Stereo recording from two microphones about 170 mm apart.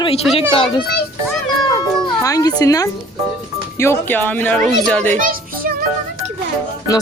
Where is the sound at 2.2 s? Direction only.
20° left (ahead or behind).